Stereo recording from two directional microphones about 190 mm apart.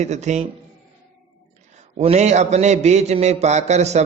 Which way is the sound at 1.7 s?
30° right (ahead or behind).